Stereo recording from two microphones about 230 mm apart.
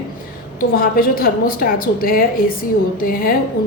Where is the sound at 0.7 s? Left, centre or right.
Left.